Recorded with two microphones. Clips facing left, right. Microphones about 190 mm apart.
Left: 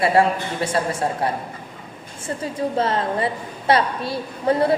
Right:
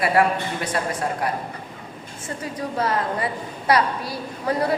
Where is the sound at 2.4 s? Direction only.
25° left (ahead or behind).